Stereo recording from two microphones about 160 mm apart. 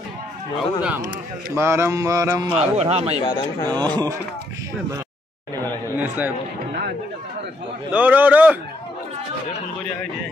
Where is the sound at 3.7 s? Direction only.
25° right (ahead or behind).